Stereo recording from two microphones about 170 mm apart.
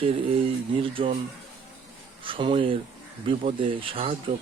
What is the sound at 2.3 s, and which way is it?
Speech, 30° right (ahead or behind).